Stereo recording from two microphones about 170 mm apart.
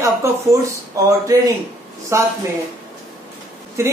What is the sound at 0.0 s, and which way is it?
Speech, 15° right (ahead or behind).